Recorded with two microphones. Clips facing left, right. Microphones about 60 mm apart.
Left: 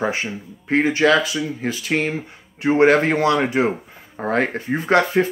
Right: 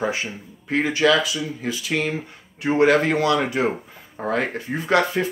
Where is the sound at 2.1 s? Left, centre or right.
Left.